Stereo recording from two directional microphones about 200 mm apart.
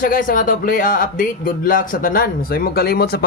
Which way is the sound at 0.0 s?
45° left (ahead or behind).